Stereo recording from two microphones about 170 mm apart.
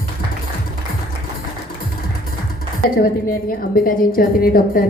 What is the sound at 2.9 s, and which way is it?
A woman's voice, 55° left (ahead or behind).